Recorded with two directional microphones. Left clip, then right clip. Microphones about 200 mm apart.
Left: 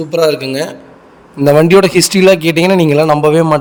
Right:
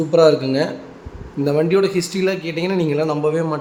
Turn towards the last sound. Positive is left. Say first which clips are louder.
# left 10 dB
turn(degrees=45)  # may be behind; listen again after turning